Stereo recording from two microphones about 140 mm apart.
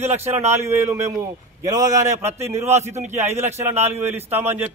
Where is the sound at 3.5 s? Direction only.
15° right (ahead or behind).